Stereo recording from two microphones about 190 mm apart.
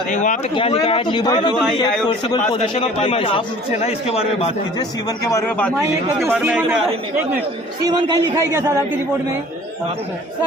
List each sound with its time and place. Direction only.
0.1 s a man's voice: 40° left (ahead or behind)
0.5 s a man's voice: 25° left (ahead or behind)
4.8 s a man's voice: 20° left (ahead or behind)
6.2 s a man's voice: 5° right (ahead or behind); by 8.2 s 20° right (ahead or behind)
8.5 s speech: 10° right (ahead or behind)